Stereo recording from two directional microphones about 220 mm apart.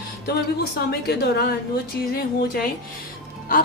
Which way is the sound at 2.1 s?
45° left (ahead or behind).